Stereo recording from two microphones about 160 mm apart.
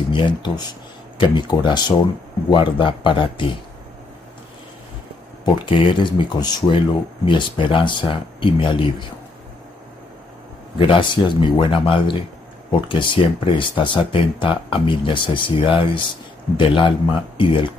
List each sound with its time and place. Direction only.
0.1 s speech: 30° left (ahead or behind)
5.4 s speech: 30° left (ahead or behind)
10.8 s speech: 30° left (ahead or behind)